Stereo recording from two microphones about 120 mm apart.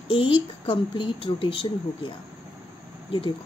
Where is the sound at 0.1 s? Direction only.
45° left (ahead or behind).